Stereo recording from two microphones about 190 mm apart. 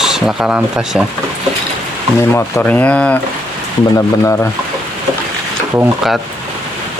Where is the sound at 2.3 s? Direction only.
10° left (ahead or behind).